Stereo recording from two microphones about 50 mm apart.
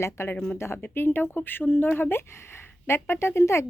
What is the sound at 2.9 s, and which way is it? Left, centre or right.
Speech, left.